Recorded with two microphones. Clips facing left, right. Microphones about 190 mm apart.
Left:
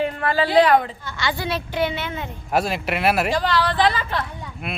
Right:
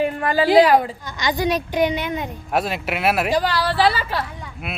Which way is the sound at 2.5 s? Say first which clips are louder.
Left 1 dB; centre (ahead or behind).